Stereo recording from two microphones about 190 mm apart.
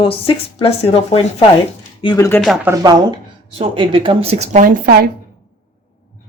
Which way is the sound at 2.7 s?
20° right (ahead or behind).